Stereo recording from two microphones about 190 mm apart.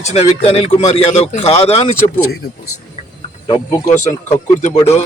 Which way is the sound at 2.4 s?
60° left (ahead or behind).